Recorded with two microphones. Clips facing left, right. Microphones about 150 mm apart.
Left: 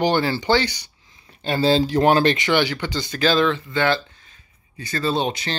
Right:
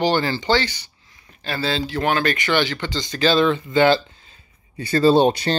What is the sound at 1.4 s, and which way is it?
Speech, 30° left (ahead or behind).